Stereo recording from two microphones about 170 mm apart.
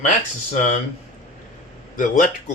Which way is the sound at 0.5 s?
45° left (ahead or behind).